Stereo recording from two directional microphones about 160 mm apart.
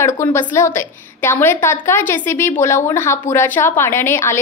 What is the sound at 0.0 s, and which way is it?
A woman's voice, 15° left (ahead or behind).